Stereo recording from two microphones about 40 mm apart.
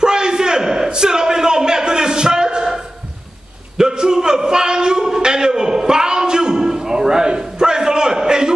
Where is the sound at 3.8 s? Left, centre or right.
Centre.